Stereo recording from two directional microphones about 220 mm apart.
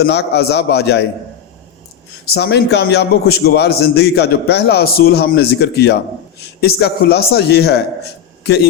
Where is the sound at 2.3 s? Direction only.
50° left (ahead or behind).